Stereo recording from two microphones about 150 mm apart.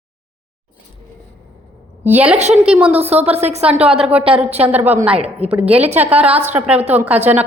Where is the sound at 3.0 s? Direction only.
45° right (ahead or behind).